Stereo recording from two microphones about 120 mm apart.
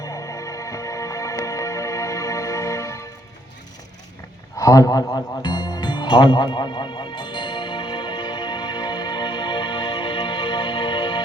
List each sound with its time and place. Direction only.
0.0 s music: 30° left (ahead or behind)
4.5 s music: 30° left (ahead or behind)